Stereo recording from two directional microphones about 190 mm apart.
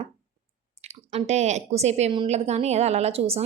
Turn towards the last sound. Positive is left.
turn(degrees=-30)  # may be behind; listen again after turning